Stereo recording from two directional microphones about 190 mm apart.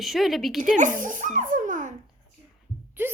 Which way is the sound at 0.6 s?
40° right (ahead or behind).